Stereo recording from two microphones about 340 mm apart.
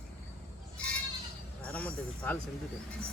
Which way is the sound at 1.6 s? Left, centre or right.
Centre.